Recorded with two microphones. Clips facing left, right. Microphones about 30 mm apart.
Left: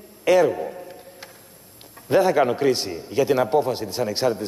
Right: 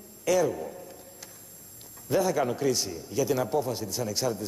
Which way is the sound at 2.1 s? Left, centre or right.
Left.